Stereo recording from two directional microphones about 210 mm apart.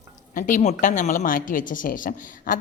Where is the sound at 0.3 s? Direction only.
40° left (ahead or behind).